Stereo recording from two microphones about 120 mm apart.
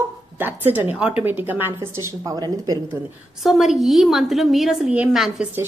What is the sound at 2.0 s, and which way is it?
Speech, 30° right (ahead or behind).